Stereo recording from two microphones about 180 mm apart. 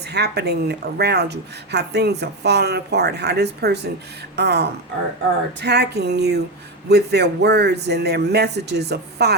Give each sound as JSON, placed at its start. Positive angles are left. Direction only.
{"t": 0.0, "sound": "a woman's voice", "side_deg": -65}